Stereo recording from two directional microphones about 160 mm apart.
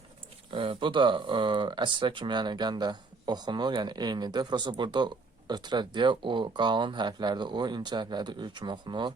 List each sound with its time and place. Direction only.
0.5 s speech: 30° right (ahead or behind)